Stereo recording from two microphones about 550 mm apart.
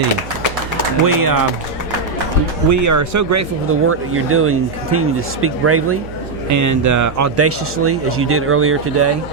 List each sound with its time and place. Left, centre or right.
1.0 s speech: right
2.6 s speech: right